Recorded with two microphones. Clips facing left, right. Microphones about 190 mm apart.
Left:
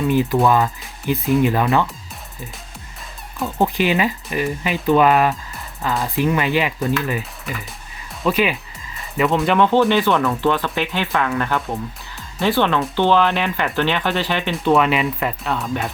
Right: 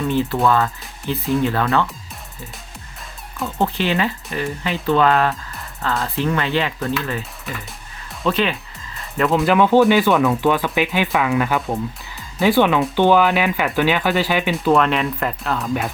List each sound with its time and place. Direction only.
0.1 s speech: 15° left (ahead or behind)
3.6 s speech: 15° left (ahead or behind)
7.2 s music: centre (ahead or behind)
8.2 s speech: 10° left (ahead or behind)